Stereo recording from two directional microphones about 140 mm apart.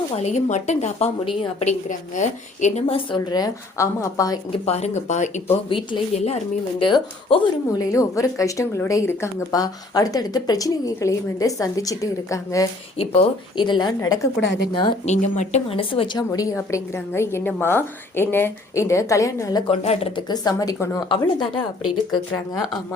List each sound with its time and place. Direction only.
0.2 s a woman's voice: 55° left (ahead or behind); by 1.6 s 40° left (ahead or behind)
1.6 s a woman's voice: 60° left (ahead or behind)
2.8 s speech: 40° left (ahead or behind); by 4.4 s 25° left (ahead or behind)
4.6 s a woman's voice: 50° left (ahead or behind)
5.6 s a woman's voice: 40° left (ahead or behind)
7.8 s speech: 25° left (ahead or behind)
13.6 s a woman's voice: 35° left (ahead or behind)
15.0 s a woman's voice: 55° left (ahead or behind); by 16.2 s 40° left (ahead or behind)
16.3 s speech: 25° left (ahead or behind)
19.6 s a woman's voice: 50° left (ahead or behind)
20.2 s speech: 30° left (ahead or behind)
21.1 s a woman's voice: 30° left (ahead or behind)